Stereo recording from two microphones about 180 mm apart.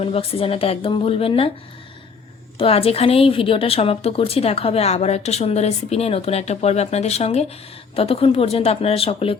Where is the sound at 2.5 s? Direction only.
30° left (ahead or behind).